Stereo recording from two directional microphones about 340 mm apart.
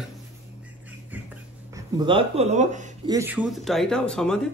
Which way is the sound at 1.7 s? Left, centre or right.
Centre.